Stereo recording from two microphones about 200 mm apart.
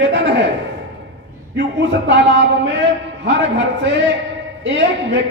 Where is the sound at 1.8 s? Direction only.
60° right (ahead or behind).